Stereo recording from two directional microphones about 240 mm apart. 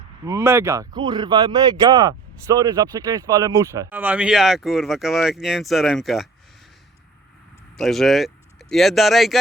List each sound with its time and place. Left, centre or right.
0.3 s speech: centre
7.8 s speech: centre